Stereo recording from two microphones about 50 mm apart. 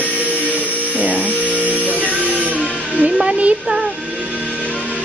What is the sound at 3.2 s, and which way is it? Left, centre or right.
Speech, centre.